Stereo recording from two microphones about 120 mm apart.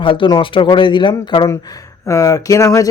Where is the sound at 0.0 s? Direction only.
45° left (ahead or behind).